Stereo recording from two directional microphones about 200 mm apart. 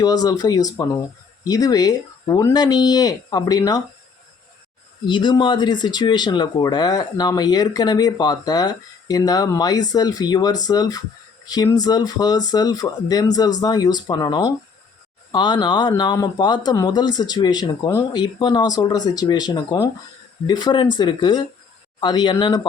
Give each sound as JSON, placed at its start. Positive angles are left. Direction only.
{"t": 0.0, "sound": "speech", "side_deg": 20}
{"t": 5.0, "sound": "speech", "side_deg": 25}